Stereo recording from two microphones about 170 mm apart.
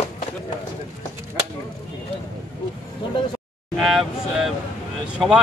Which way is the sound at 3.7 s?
Centre (ahead or behind).